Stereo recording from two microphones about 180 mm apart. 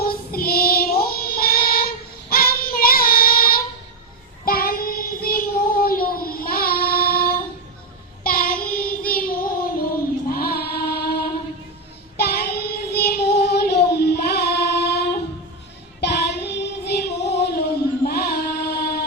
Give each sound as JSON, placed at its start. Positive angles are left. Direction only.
{"t": 0.0, "sound": "child singing", "side_deg": 55}
{"t": 10.2, "sound": "music", "side_deg": 55}
{"t": 12.1, "sound": "child singing", "side_deg": 60}
{"t": 18.0, "sound": "a sound", "side_deg": 60}